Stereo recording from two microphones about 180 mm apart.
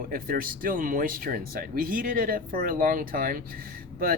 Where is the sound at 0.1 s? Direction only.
55° right (ahead or behind).